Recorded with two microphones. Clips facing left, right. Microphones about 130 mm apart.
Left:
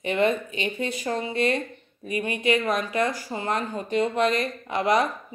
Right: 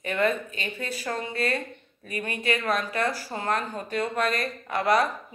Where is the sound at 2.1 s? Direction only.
20° left (ahead or behind).